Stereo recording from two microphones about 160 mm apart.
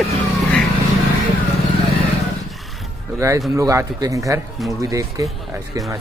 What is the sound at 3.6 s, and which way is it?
Speech, 20° right (ahead or behind).